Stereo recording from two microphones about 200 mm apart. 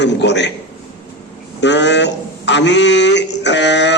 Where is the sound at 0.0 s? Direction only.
60° left (ahead or behind).